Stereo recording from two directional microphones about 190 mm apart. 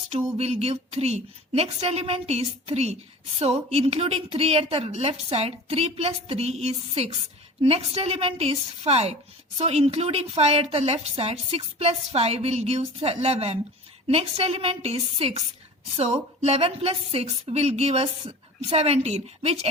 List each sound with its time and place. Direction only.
0.3 s a woman's voice: 35° right (ahead or behind)